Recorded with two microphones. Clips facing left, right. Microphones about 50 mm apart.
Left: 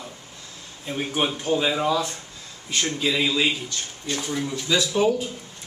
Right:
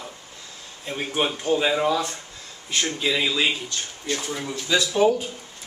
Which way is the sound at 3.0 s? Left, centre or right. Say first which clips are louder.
Left 1 dB; centre.